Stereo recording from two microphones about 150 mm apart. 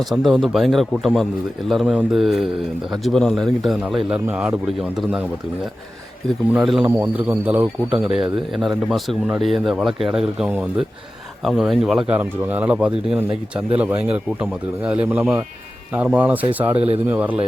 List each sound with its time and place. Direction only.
0.0 s speech: centre (ahead or behind)
6.5 s speech: 5° right (ahead or behind)
16.7 s speech: 40° right (ahead or behind)
17.1 s speech: 10° right (ahead or behind)